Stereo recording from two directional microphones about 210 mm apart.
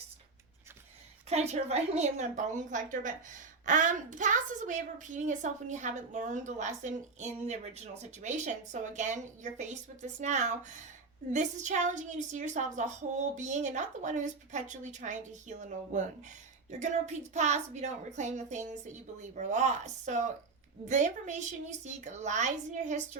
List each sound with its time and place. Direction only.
1.3 s a woman's voice: 30° right (ahead or behind)